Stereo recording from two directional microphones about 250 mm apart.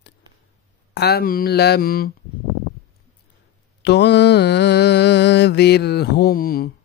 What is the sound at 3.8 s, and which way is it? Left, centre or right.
Mantra, left.